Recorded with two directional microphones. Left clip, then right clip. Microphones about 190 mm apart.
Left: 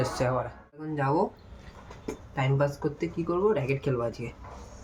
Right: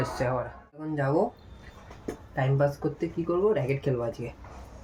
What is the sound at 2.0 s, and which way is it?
Speech, centre (ahead or behind).